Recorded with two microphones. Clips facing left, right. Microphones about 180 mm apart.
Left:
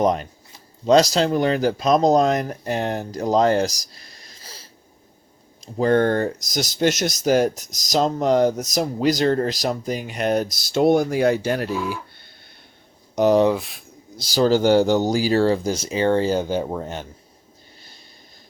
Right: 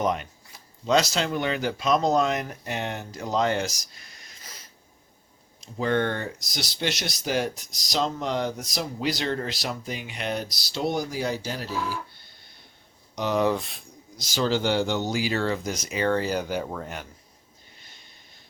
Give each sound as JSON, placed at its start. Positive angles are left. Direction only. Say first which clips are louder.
{"t": 0.0, "sound": "speech", "louder": "left 6 dB", "side_deg": 35}
{"t": 11.9, "sound": "a sound", "louder": "left 4 dB", "side_deg": 60}
{"t": 13.1, "sound": "speech", "louder": "left 10 dB", "side_deg": 45}
{"t": 13.5, "sound": "speech", "louder": "left 4 dB", "side_deg": 0}
{"t": 14.2, "sound": "speech", "louder": "left 7 dB", "side_deg": 35}
{"t": 17.7, "sound": "snort", "louder": "left 5 dB", "side_deg": 35}